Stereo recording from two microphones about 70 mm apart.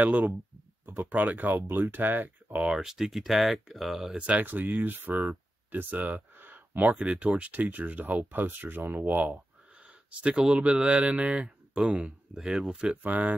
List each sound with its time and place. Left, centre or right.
0.0 s speech: right
2.5 s speech: centre
4.3 s speech: right
5.1 s speech: centre
5.7 s speech: right
10.2 s speech: centre
13.0 s speech: right